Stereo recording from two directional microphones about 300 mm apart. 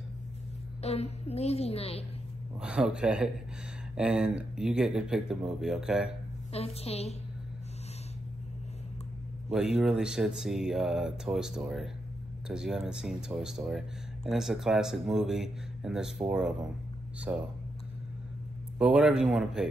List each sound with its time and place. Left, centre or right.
0.8 s a woman's voice: left
2.6 s a man's voice: centre
6.5 s a woman's voice: centre
9.8 s a man's voice: centre
18.8 s a man's voice: centre